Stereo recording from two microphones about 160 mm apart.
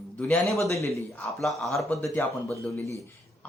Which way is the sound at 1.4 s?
Centre (ahead or behind).